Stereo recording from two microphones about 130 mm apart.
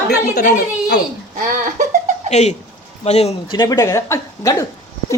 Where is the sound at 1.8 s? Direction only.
70° right (ahead or behind).